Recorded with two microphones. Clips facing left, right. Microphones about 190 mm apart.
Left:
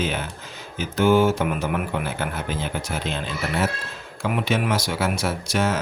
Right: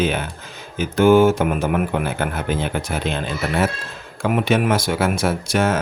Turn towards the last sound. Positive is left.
turn(degrees=-55)  # may be behind; listen again after turning